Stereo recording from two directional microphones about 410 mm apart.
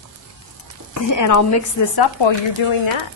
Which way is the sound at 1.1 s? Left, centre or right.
Left.